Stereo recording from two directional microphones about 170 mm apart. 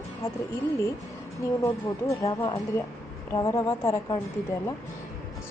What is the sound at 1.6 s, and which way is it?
Speech, 15° left (ahead or behind).